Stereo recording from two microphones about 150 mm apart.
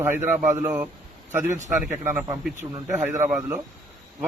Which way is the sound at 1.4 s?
55° right (ahead or behind).